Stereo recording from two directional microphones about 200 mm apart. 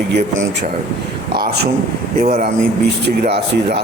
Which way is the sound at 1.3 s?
50° right (ahead or behind).